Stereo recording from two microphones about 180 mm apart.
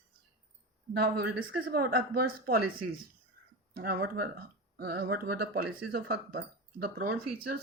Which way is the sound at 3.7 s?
60° right (ahead or behind).